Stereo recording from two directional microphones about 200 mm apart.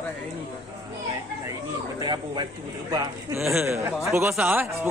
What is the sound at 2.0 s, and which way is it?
Speech, 20° right (ahead or behind).